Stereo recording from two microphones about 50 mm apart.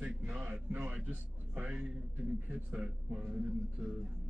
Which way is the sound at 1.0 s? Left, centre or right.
Right.